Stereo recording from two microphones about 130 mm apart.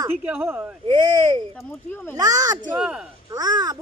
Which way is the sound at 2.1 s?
30° right (ahead or behind).